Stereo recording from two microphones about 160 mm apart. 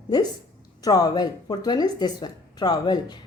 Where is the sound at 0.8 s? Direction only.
25° left (ahead or behind).